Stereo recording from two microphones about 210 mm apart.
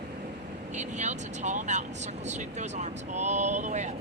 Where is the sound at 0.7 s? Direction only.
35° right (ahead or behind).